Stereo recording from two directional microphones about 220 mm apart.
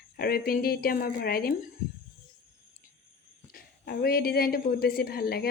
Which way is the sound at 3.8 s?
45° left (ahead or behind).